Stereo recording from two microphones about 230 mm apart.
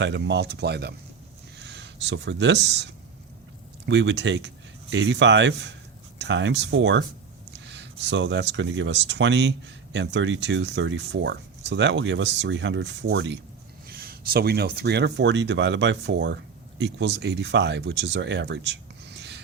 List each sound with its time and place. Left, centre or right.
0.0 s speech: right